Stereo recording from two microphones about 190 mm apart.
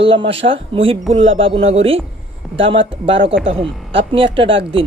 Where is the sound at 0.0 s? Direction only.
30° right (ahead or behind).